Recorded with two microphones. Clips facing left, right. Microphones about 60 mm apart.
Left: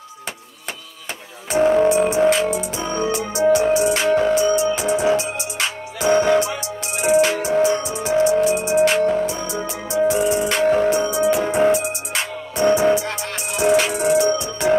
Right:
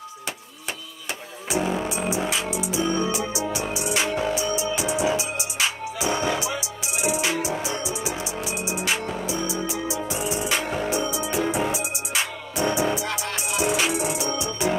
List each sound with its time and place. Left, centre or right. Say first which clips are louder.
1.5 s music: left 10 dB; left